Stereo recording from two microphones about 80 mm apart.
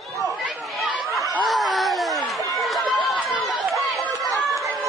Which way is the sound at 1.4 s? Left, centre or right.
Centre.